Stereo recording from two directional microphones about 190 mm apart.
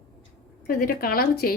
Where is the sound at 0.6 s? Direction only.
50° left (ahead or behind).